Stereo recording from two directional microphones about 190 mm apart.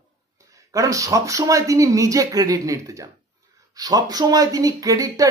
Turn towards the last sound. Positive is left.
turn(degrees=-20)  # may be behind; listen again after turning